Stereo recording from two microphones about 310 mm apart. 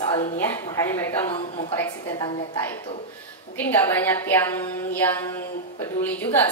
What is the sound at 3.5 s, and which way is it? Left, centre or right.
A woman's voice, centre.